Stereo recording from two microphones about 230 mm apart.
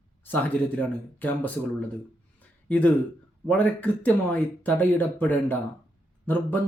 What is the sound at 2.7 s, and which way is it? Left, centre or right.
Speech, centre.